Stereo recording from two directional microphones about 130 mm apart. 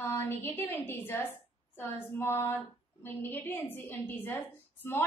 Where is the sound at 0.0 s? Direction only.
20° left (ahead or behind).